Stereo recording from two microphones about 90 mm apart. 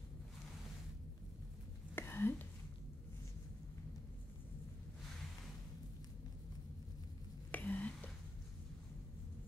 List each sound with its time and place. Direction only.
2.0 s whispering: 25° left (ahead or behind)
7.5 s whispering: 20° left (ahead or behind)